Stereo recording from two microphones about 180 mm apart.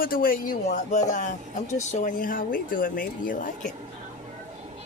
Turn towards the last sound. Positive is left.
turn(degrees=45)  # may be behind; listen again after turning